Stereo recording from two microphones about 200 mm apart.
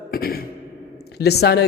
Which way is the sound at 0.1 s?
50° left (ahead or behind).